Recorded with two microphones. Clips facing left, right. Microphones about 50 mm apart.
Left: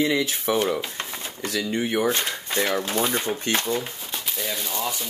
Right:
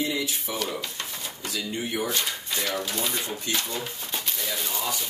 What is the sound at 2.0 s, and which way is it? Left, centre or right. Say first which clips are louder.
Speech: left 5 dB; left.